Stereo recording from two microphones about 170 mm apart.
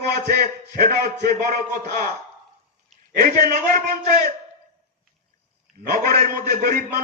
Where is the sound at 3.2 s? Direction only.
60° right (ahead or behind).